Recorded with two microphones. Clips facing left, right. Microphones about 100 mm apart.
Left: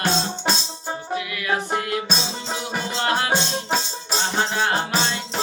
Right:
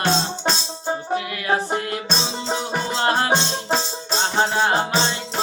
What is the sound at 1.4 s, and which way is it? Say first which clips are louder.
Music: right 1 dB; 30° right (ahead or behind).